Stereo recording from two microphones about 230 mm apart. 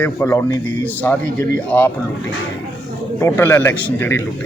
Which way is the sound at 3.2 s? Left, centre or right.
Centre.